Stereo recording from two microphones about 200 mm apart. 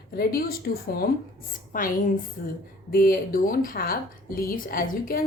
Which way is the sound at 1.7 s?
45° left (ahead or behind).